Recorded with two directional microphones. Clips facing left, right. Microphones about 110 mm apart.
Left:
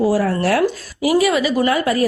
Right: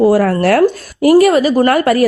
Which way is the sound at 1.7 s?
60° right (ahead or behind).